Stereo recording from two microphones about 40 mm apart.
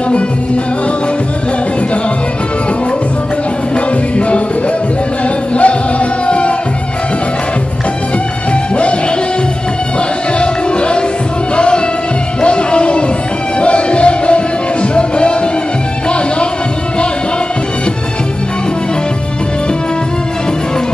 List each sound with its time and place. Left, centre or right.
5.6 s music: left
10.4 s music: left